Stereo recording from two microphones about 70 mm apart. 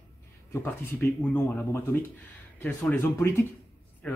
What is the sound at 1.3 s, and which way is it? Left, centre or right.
Speech, left.